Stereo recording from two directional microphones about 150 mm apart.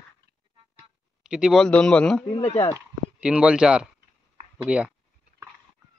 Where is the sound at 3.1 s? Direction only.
5° right (ahead or behind).